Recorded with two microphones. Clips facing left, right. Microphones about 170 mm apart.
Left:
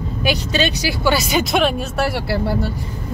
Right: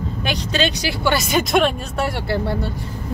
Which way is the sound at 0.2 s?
5° left (ahead or behind).